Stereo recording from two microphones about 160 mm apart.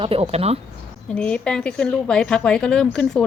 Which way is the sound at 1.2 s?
5° left (ahead or behind).